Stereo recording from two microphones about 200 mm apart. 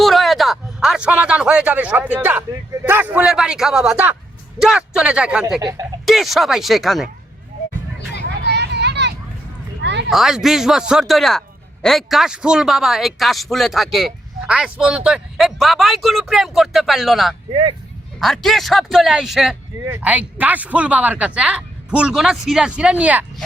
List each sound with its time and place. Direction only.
0.0 s a man's voice: centre (ahead or behind)
5.5 s speech: 20° right (ahead or behind)
6.1 s a man's voice: centre (ahead or behind)
8.4 s vehicle: 55° right (ahead or behind)
9.8 s a sound: 60° right (ahead or behind)
10.1 s a man's voice: centre (ahead or behind)
17.5 s speech: 25° right (ahead or behind)
18.2 s a man's voice: centre (ahead or behind)